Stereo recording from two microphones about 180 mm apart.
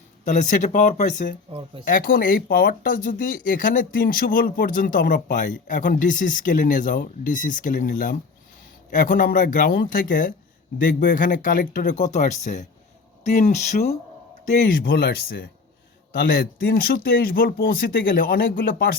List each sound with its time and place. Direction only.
0.3 s speech: 45° left (ahead or behind)